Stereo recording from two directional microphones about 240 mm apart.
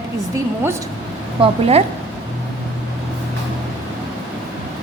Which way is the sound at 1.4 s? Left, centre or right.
Right.